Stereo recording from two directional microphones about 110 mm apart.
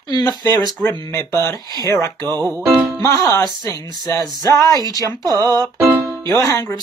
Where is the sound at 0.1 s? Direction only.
40° left (ahead or behind).